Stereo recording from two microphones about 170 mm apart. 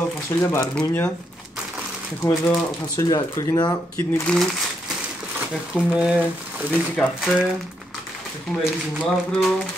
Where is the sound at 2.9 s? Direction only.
20° left (ahead or behind).